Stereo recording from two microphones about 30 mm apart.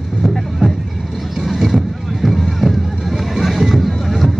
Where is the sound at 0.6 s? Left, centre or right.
Right.